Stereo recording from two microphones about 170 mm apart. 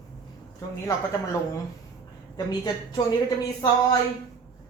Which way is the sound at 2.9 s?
25° left (ahead or behind).